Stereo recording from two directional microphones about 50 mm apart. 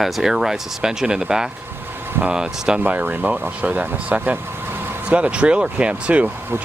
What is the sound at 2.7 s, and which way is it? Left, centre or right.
Speech, right.